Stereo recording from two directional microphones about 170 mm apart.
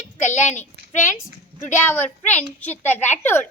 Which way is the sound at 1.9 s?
10° left (ahead or behind).